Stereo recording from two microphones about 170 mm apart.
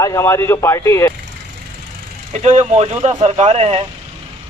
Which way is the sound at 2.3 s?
40° right (ahead or behind).